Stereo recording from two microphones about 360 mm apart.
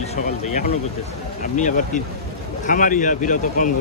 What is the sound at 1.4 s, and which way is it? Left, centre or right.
Speech, left.